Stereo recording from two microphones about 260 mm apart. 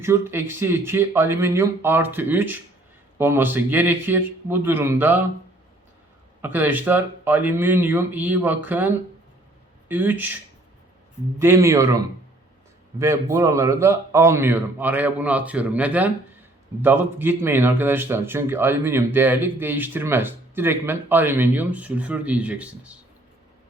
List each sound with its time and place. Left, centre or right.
0.0 s speech: centre
6.4 s speech: centre
9.9 s speech: centre
11.3 s speech: centre